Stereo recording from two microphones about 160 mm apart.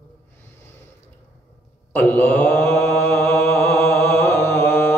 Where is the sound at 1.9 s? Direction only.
15° left (ahead or behind).